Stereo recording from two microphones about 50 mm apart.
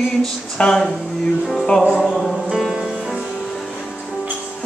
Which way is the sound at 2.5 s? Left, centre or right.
Centre.